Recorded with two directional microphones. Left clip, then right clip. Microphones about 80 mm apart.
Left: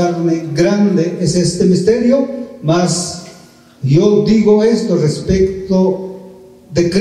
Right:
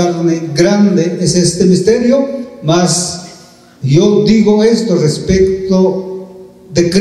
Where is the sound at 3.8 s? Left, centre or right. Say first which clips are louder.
Right 2 dB; right.